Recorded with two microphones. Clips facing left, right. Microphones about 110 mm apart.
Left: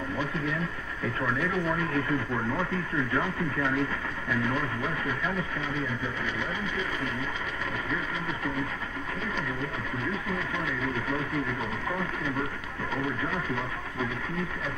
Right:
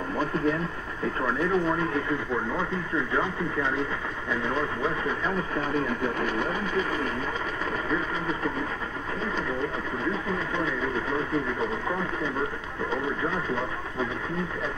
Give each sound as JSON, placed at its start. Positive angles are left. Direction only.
{"t": 1.2, "sound": "speech", "side_deg": -30}
{"t": 3.1, "sound": "speech", "side_deg": -25}
{"t": 5.6, "sound": "speech", "side_deg": -50}
{"t": 10.6, "sound": "speech", "side_deg": -30}